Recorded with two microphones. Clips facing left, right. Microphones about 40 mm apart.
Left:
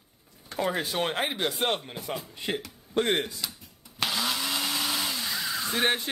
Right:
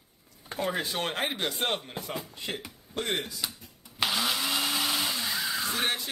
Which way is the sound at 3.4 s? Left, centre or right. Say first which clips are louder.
Right 1 dB; centre.